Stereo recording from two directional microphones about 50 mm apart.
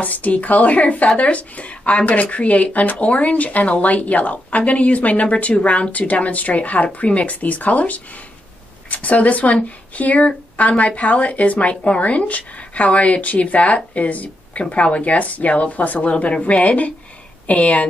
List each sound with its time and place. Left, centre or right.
0.0 s speech: left